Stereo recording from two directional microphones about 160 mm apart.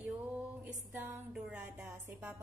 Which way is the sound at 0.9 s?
10° right (ahead or behind).